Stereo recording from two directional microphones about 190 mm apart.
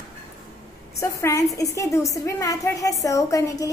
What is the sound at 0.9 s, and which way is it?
A woman's voice, 15° left (ahead or behind).